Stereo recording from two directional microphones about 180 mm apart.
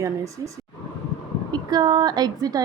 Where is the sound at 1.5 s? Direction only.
20° right (ahead or behind).